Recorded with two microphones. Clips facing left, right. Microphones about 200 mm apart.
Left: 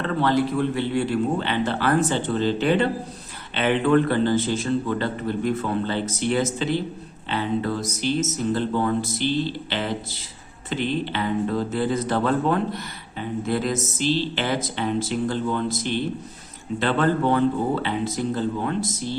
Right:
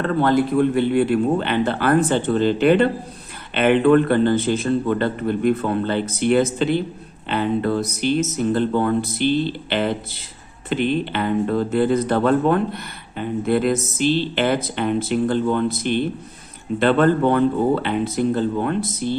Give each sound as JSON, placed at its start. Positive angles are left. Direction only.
{"t": 0.0, "sound": "speech", "side_deg": -50}